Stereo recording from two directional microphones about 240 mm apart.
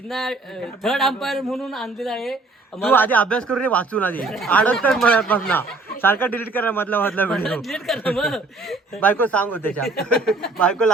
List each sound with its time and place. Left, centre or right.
0.1 s a man's voice: centre